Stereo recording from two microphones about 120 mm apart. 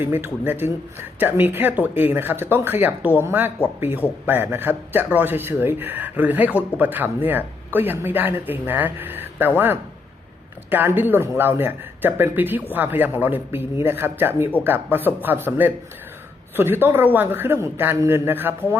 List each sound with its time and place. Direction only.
0.0 s a man's voice: 15° right (ahead or behind)
10.7 s a man's voice: 15° right (ahead or behind)